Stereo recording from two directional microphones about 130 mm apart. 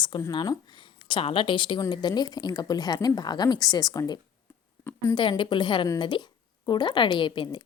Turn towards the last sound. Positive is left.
turn(degrees=35)  # may be behind; listen again after turning